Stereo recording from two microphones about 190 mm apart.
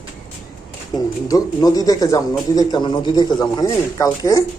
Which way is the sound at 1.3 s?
20° left (ahead or behind).